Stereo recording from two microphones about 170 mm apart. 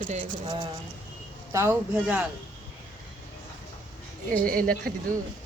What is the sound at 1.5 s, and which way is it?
Speech, 15° right (ahead or behind).